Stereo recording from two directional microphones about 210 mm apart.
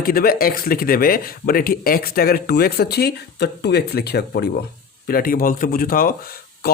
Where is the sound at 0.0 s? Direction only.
45° left (ahead or behind).